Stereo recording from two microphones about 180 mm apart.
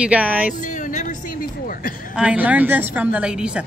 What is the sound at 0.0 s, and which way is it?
Speech, 5° right (ahead or behind).